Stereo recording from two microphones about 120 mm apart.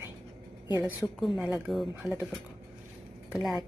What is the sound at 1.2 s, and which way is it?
Speech, centre (ahead or behind).